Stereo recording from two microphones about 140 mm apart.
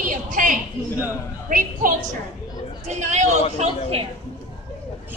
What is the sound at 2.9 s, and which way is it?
A woman's voice, 55° right (ahead or behind).